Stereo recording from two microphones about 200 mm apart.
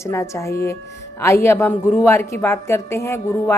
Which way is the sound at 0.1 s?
15° left (ahead or behind).